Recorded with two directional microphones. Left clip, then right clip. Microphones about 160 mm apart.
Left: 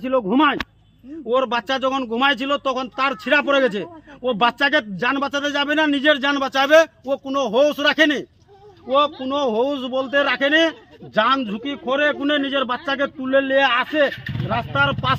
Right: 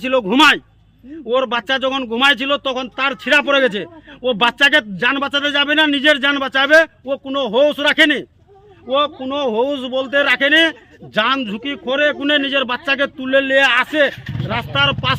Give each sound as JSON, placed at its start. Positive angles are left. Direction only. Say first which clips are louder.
{"t": 0.0, "sound": "speech", "louder": "right 5 dB", "side_deg": -20}
{"t": 1.3, "sound": "a man's voice", "louder": "right 3 dB", "side_deg": 0}
{"t": 9.3, "sound": "a man's voice", "louder": "right 2 dB", "side_deg": -10}
{"t": 14.4, "sound": "speech", "louder": "right 2 dB", "side_deg": -25}